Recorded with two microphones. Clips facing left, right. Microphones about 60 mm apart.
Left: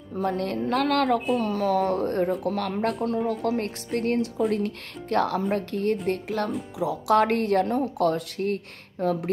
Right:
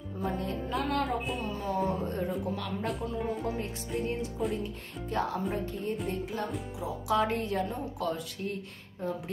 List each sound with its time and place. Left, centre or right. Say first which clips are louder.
0.2 s speech: left 7 dB; left
9.0 s speech: left 9 dB; left